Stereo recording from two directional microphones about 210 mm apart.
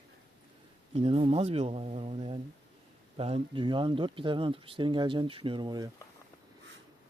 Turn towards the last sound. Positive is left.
turn(degrees=-20)  # may be behind; listen again after turning